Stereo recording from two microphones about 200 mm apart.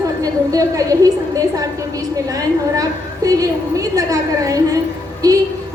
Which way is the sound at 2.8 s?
15° right (ahead or behind).